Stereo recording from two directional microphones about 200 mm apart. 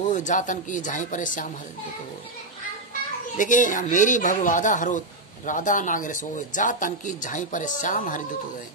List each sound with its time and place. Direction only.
0.0 s speech: 40° left (ahead or behind)
3.3 s speech: 40° left (ahead or behind)